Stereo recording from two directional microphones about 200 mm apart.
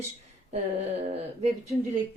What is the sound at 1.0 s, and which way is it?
Speech, 30° right (ahead or behind).